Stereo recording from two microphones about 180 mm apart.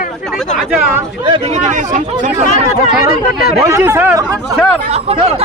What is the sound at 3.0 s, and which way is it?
Speech, 55° left (ahead or behind).